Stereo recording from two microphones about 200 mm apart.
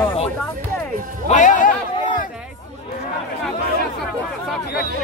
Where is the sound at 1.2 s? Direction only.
40° left (ahead or behind).